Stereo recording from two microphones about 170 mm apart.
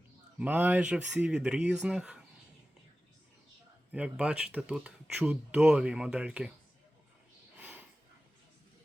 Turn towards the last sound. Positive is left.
turn(degrees=-10)  # may be behind; listen again after turning